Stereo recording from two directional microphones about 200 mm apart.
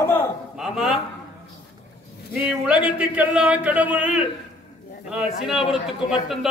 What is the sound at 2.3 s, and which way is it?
Speech, 5° right (ahead or behind).